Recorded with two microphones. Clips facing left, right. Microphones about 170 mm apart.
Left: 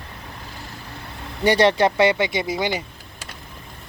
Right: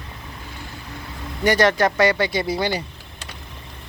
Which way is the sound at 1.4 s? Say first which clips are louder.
Left 1 dB; 30° left (ahead or behind).